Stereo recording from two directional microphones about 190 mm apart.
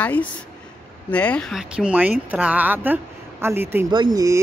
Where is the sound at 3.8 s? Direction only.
20° right (ahead or behind).